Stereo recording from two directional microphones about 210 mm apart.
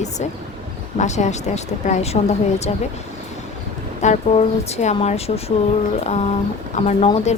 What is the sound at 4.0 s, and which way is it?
Speech, 35° left (ahead or behind).